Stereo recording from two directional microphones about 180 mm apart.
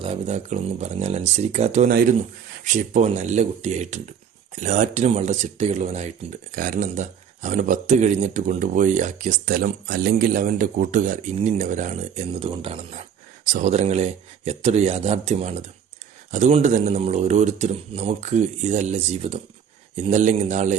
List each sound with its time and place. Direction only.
0.0 s speech: 35° right (ahead or behind)
6.5 s speech: 50° right (ahead or behind); by 12.8 s 30° right (ahead or behind)
12.9 s speech: 45° right (ahead or behind)